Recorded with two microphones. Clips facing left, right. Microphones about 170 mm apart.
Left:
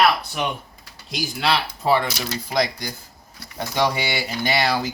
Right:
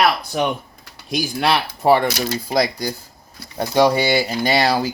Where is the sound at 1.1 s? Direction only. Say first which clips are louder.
Right 4 dB; 55° right (ahead or behind).